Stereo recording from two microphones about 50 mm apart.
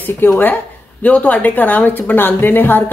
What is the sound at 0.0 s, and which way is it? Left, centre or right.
A woman's voice, left.